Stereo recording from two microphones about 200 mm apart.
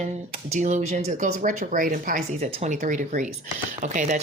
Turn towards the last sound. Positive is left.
turn(degrees=-40)  # may be behind; listen again after turning